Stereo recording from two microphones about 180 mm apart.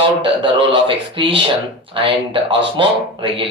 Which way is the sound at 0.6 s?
30° right (ahead or behind).